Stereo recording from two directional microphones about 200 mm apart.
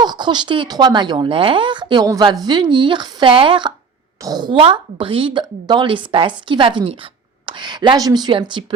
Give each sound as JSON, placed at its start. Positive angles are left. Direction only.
{"t": 0.0, "sound": "a woman's voice", "side_deg": -20}